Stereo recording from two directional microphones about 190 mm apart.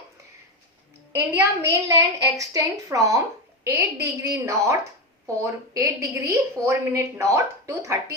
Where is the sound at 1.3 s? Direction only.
15° right (ahead or behind).